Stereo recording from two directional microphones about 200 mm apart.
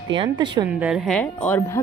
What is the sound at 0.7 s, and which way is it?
Speech, 5° right (ahead or behind).